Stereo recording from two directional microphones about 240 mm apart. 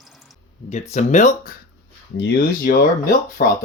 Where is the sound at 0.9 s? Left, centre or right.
Left.